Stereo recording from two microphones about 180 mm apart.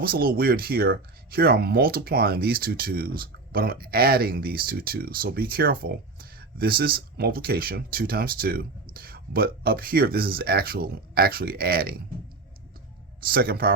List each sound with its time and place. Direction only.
0.0 s speech: 55° right (ahead or behind)
13.2 s speech: 55° right (ahead or behind)